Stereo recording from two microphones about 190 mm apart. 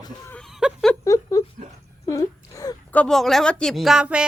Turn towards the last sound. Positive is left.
turn(degrees=-5)  # may be behind; listen again after turning